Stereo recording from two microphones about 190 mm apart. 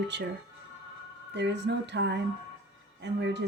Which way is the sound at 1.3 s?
65° right (ahead or behind).